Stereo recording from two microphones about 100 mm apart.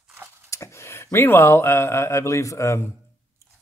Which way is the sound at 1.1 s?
25° left (ahead or behind).